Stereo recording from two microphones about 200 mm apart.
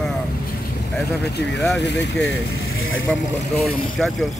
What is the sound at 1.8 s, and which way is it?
Speech, 60° left (ahead or behind).